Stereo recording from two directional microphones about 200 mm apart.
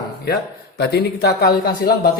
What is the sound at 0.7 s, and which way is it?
Speech, 55° left (ahead or behind).